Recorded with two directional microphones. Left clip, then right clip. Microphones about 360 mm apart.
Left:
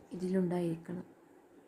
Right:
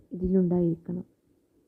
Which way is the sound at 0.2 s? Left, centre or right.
Centre.